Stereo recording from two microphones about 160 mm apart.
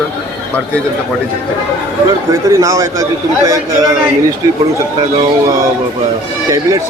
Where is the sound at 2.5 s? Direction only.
20° right (ahead or behind).